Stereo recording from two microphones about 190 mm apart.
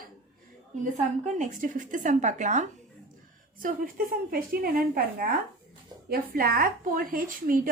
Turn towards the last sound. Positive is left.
turn(degrees=-45)  # may be behind; listen again after turning